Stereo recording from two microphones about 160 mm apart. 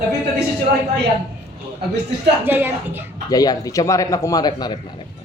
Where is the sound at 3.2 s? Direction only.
25° left (ahead or behind).